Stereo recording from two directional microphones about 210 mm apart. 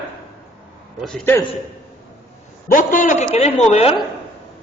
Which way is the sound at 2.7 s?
40° left (ahead or behind).